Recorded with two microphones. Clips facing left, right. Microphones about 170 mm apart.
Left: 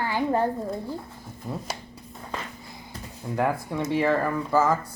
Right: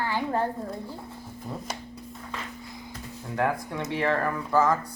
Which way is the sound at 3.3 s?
5° left (ahead or behind).